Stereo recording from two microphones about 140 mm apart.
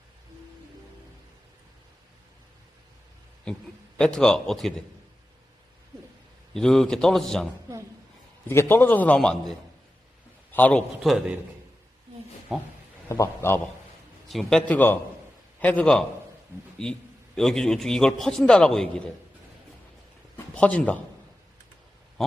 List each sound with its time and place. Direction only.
3.9 s a man's voice: 5° left (ahead or behind)
6.5 s a man's voice: 5° left (ahead or behind)
8.4 s a man's voice: 15° left (ahead or behind); by 11.3 s centre (ahead or behind)
12.5 s a man's voice: centre (ahead or behind)
13.1 s a man's voice: 20° left (ahead or behind)
14.3 s a man's voice: centre (ahead or behind)
14.7 s a man's voice: 15° left (ahead or behind)
20.3 s speech: 10° left (ahead or behind)